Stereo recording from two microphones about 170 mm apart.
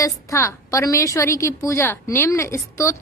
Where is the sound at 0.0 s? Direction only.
15° left (ahead or behind).